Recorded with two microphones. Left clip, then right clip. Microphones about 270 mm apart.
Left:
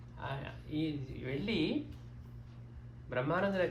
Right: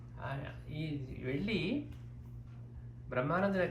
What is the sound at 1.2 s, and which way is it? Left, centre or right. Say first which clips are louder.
Speech: even; left.